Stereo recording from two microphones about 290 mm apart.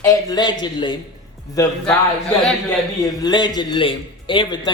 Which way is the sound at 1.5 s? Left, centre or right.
Centre.